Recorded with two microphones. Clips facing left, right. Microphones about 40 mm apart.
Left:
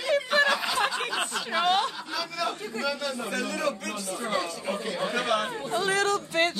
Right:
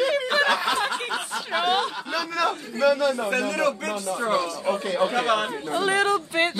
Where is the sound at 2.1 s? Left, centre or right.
Right.